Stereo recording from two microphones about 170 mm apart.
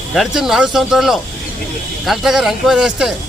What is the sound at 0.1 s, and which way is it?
A man's voice, centre (ahead or behind).